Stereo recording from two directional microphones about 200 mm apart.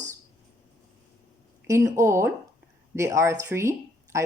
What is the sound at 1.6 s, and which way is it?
Speech, 15° right (ahead or behind).